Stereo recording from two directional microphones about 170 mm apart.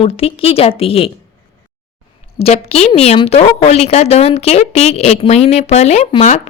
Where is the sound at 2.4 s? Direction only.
35° left (ahead or behind).